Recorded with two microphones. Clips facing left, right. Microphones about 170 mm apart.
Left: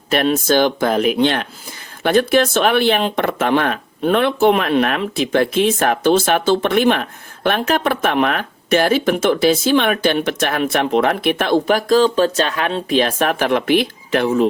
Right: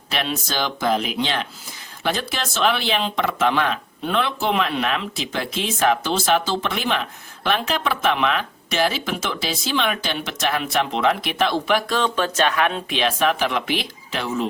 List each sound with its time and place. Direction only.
0.1 s speech: 50° left (ahead or behind)